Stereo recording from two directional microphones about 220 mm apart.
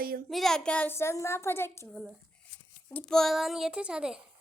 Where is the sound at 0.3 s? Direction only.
Centre (ahead or behind).